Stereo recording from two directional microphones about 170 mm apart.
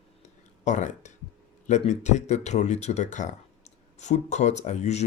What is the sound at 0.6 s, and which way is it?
A man's voice, 45° left (ahead or behind).